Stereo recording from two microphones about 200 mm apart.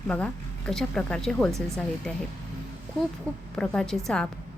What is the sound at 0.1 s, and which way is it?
A woman's voice, 5° left (ahead or behind).